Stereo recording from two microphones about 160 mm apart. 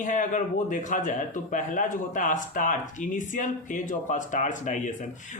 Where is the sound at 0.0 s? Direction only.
50° left (ahead or behind).